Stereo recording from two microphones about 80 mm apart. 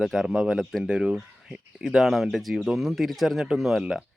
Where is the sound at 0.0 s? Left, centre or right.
Centre.